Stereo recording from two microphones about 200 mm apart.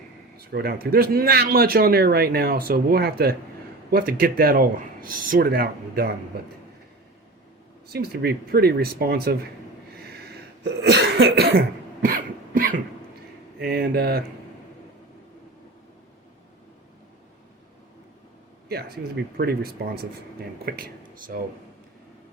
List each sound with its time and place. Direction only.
0.3 s speech: 50° right (ahead or behind)
7.9 s speech: 55° right (ahead or behind)
9.9 s cough: 55° right (ahead or behind)
12.0 s cough: 45° right (ahead or behind)
13.6 s speech: 55° right (ahead or behind)
18.7 s speech: 55° right (ahead or behind)